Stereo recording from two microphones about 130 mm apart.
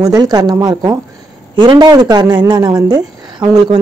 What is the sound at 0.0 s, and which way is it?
A woman's voice, 30° right (ahead or behind).